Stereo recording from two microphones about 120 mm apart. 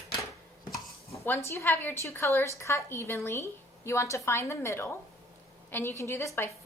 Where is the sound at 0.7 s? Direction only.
20° left (ahead or behind).